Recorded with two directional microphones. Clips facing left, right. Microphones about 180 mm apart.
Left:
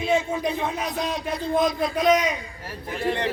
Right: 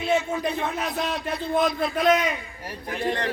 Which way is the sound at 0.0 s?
10° left (ahead or behind).